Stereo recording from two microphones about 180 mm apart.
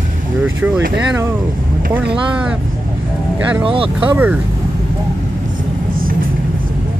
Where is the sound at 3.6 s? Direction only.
30° right (ahead or behind).